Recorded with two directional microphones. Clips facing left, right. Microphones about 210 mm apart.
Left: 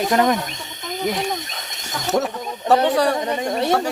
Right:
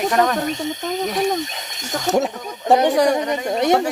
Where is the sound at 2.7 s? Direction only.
15° right (ahead or behind).